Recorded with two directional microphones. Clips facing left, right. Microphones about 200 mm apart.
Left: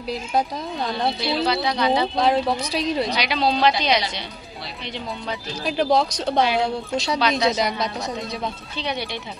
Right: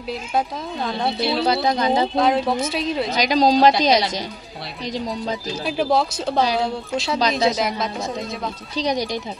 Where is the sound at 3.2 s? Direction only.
40° right (ahead or behind).